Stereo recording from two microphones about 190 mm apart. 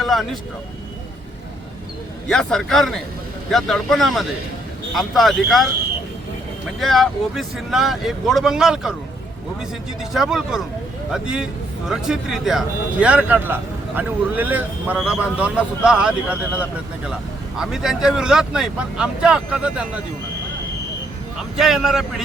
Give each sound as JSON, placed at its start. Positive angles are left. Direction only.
{"t": 0.0, "sound": "speech", "side_deg": 0}
{"t": 2.2, "sound": "speech", "side_deg": 5}
{"t": 6.7, "sound": "speech", "side_deg": 0}
{"t": 10.0, "sound": "a man's voice", "side_deg": 0}
{"t": 21.3, "sound": "a man's voice", "side_deg": 0}